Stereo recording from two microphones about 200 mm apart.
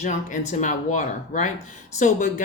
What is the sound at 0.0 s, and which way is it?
Speech, 35° left (ahead or behind).